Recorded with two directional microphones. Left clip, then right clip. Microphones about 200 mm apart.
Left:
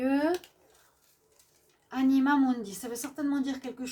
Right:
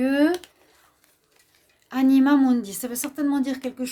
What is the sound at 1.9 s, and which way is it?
A woman's voice, 60° right (ahead or behind).